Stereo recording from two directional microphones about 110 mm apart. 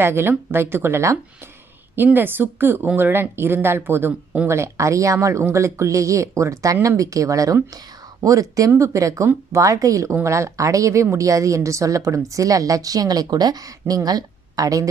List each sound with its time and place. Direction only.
0.0 s a woman's voice: 20° right (ahead or behind)